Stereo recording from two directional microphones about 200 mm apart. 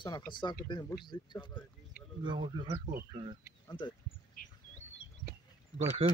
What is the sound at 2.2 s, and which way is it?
Speech, 20° right (ahead or behind).